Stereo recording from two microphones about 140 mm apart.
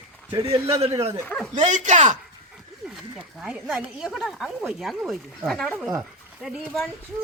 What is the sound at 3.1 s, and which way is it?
Speech, 5° right (ahead or behind).